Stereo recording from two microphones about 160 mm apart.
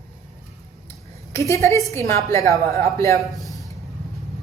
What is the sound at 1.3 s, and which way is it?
A woman's voice, 20° left (ahead or behind).